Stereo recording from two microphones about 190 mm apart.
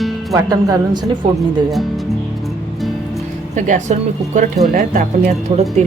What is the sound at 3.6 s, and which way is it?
Speech, 40° right (ahead or behind).